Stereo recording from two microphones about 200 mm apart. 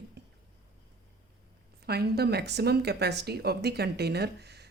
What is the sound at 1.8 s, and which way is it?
Speech, 55° right (ahead or behind).